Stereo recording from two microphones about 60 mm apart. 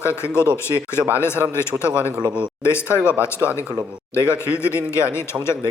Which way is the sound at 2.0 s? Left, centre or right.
Left.